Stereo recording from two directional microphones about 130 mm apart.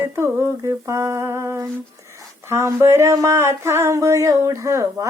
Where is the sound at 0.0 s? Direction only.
20° right (ahead or behind).